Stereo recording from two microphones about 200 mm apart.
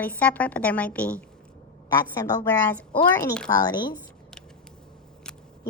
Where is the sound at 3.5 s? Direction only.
20° left (ahead or behind).